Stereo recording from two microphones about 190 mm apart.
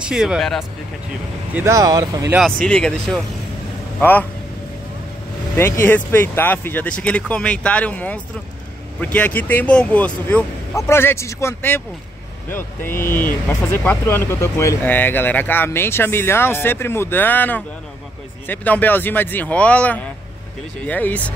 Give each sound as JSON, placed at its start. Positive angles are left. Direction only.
{"t": 0.0, "sound": "speech", "side_deg": -5}
{"t": 1.5, "sound": "speech", "side_deg": -15}
{"t": 2.3, "sound": "speech", "side_deg": 5}
{"t": 5.6, "sound": "speech", "side_deg": 10}